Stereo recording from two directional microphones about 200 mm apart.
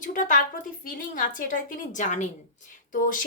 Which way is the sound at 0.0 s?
40° left (ahead or behind).